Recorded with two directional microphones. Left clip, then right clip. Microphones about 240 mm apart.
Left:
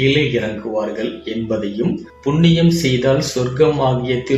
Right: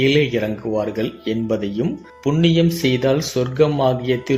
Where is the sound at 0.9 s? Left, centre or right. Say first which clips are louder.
Even; right.